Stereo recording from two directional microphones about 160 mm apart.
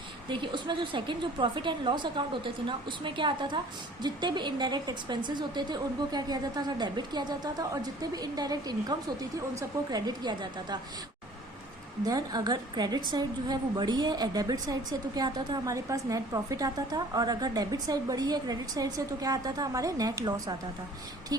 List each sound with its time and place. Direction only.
0.3 s a woman's voice: 30° right (ahead or behind)
12.0 s a woman's voice: 25° right (ahead or behind)